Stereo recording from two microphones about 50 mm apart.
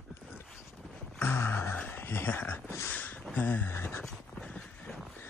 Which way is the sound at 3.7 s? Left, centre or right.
Left.